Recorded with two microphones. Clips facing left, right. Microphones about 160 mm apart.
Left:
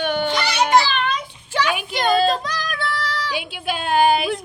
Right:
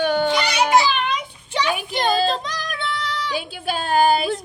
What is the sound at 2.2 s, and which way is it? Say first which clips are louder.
Yodeling: left 2 dB; 25° right (ahead or behind).